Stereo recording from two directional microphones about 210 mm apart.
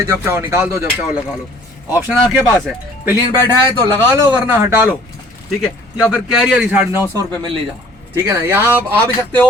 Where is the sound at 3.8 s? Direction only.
15° right (ahead or behind).